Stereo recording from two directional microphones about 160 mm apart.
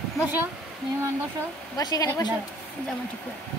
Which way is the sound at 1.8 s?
25° left (ahead or behind).